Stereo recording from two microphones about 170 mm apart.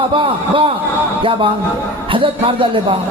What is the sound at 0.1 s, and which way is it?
A man's voice, 30° right (ahead or behind).